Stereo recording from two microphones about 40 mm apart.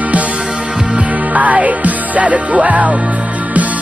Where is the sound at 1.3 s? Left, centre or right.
Right.